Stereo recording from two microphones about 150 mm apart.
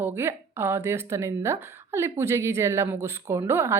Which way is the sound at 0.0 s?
15° right (ahead or behind).